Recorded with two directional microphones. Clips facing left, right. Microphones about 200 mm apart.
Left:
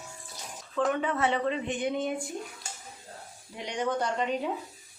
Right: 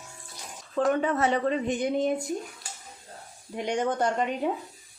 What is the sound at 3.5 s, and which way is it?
Speech, 50° right (ahead or behind).